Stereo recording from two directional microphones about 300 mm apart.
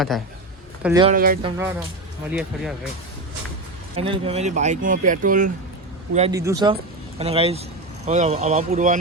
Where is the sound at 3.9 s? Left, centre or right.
Centre.